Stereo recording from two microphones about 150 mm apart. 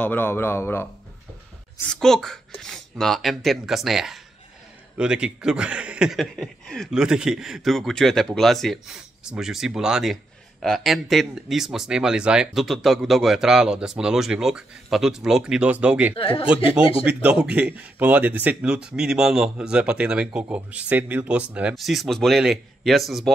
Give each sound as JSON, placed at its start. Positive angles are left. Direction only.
{"t": 0.0, "sound": "a man's voice", "side_deg": 10}
{"t": 1.9, "sound": "speech", "side_deg": 5}
{"t": 16.2, "sound": "speech", "side_deg": 40}
{"t": 17.0, "sound": "speech", "side_deg": -10}